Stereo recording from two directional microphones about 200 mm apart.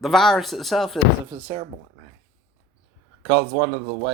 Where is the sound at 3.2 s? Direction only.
20° right (ahead or behind).